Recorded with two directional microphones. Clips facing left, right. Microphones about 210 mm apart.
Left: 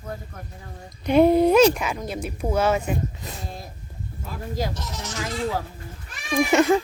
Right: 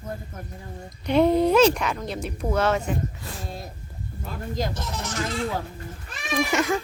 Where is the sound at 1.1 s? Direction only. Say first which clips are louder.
Left 3 dB; 10° left (ahead or behind).